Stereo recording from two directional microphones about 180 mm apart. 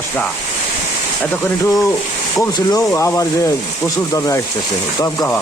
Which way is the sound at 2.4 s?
15° left (ahead or behind).